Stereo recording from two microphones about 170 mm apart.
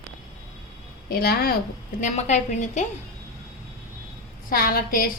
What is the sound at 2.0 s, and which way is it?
Speech, 45° left (ahead or behind).